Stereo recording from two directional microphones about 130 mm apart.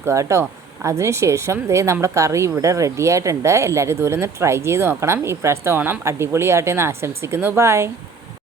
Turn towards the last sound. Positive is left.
turn(degrees=-20)  # may be behind; listen again after turning